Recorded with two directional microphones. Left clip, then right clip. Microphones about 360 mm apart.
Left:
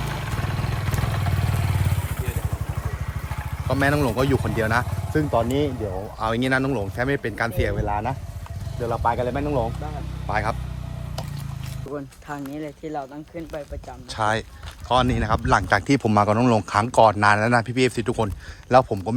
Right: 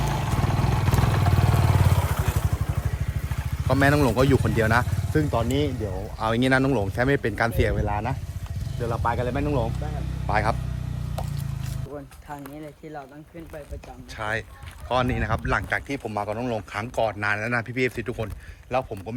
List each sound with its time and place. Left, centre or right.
0.0 s vehicle: right
2.8 s vehicle: centre
3.7 s speech: centre
14.1 s speech: centre